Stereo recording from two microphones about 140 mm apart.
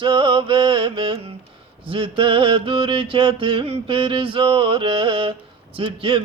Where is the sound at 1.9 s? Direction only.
40° right (ahead or behind).